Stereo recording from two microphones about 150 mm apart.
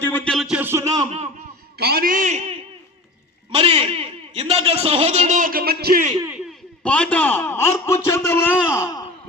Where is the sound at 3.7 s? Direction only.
35° right (ahead or behind); by 6.0 s 85° right.